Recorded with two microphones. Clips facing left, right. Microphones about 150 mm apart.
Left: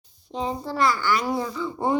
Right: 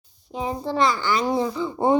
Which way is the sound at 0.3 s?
15° right (ahead or behind).